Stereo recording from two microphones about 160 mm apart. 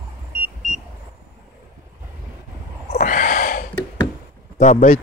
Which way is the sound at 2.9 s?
55° left (ahead or behind).